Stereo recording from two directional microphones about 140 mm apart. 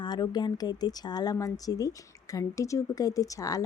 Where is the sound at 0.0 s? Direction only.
30° left (ahead or behind).